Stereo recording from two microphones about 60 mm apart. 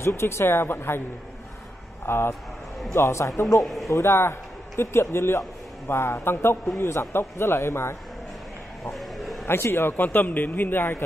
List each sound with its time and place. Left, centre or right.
0.0 s a man's voice: left
2.0 s speech: left
2.9 s a man's voice: left
3.6 s a man's voice: centre
3.9 s a man's voice: left
8.9 s a sound: centre
9.5 s a man's voice: left